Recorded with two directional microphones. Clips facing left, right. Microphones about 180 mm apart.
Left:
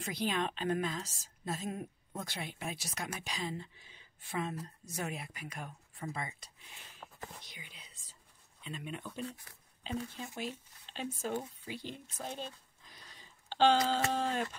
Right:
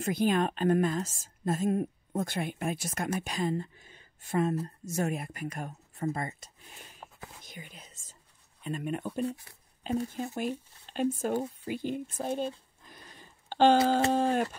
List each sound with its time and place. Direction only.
0.0 s a woman's voice: 50° right (ahead or behind)
7.0 s whispering: 30° right (ahead or behind)
7.4 s whispering: 50° right (ahead or behind)
8.6 s a woman's voice: 50° right (ahead or behind)
12.8 s a sound: 55° right (ahead or behind)
14.1 s a woman's voice: 50° right (ahead or behind)